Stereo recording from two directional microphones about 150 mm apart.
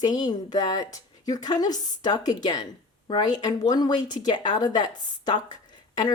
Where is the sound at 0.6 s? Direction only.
25° left (ahead or behind).